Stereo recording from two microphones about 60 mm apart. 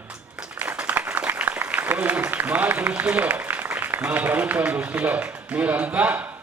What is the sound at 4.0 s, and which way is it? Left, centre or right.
A man's voice, right.